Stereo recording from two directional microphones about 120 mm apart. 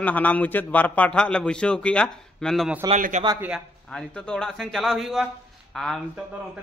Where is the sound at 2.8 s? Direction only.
35° right (ahead or behind).